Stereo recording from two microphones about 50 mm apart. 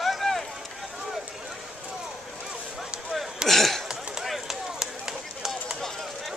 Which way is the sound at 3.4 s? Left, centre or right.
Centre.